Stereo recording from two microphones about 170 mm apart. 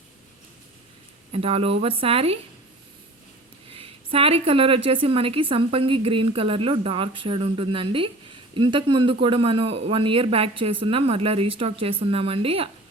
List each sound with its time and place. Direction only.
1.3 s a woman's voice: 35° right (ahead or behind)
3.7 s a woman's voice: 30° right (ahead or behind)